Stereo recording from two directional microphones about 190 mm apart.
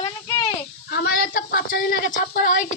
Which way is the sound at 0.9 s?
55° left (ahead or behind).